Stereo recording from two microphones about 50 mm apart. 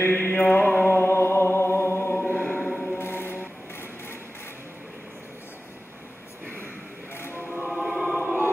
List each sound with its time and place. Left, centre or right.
0.1 s mantra: left
0.8 s mantra: left
2.3 s chant: left
2.7 s a sound: centre
3.0 s a sound: left
7.2 s choir: left
7.4 s choir: right
7.7 s choir: centre